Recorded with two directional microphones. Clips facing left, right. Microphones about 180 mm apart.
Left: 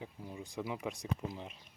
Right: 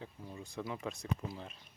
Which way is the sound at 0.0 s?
15° left (ahead or behind).